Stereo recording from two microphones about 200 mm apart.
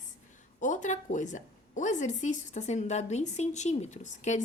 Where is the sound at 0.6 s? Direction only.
40° left (ahead or behind).